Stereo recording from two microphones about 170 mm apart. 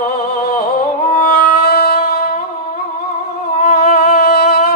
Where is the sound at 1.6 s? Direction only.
65° left (ahead or behind).